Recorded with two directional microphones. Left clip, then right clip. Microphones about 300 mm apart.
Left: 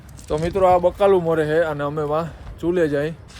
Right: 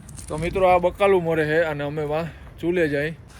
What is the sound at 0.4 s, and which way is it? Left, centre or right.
Speech, centre.